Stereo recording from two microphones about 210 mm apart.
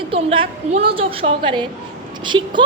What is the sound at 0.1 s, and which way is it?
A woman's voice, 25° right (ahead or behind).